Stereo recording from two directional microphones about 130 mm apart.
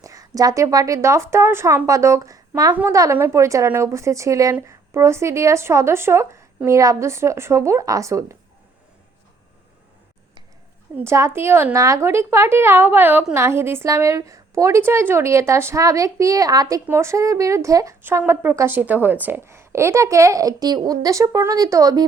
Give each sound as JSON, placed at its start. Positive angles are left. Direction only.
{"t": 0.0, "sound": "a woman's voice", "side_deg": -25}
{"t": 10.9, "sound": "a woman's voice", "side_deg": -20}